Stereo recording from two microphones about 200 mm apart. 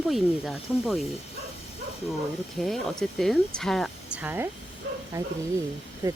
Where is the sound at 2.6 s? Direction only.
Centre (ahead or behind).